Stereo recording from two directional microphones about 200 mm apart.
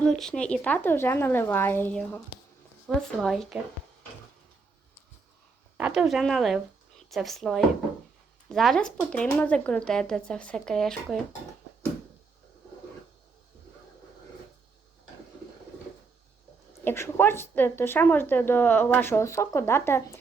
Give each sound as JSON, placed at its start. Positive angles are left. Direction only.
{"t": 0.0, "sound": "speech", "side_deg": 5}
{"t": 5.7, "sound": "speech", "side_deg": -5}
{"t": 16.8, "sound": "speech", "side_deg": 10}